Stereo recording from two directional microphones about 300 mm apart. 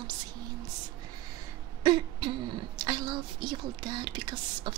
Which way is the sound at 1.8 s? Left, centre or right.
Centre.